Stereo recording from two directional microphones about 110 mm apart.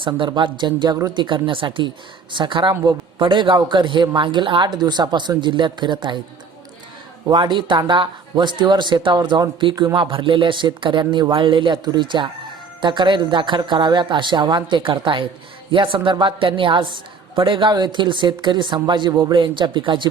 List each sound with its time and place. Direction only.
0.2 s speech: 45° right (ahead or behind)
7.3 s speech: 45° right (ahead or behind)